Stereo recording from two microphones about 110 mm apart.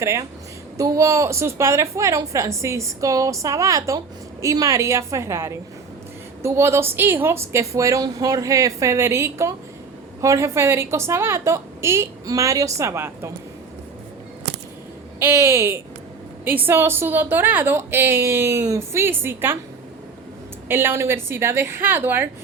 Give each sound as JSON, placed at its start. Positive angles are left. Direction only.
{"t": 0.0, "sound": "a woman's voice", "side_deg": -25}
{"t": 15.2, "sound": "a woman's voice", "side_deg": -25}
{"t": 20.7, "sound": "a woman's voice", "side_deg": -20}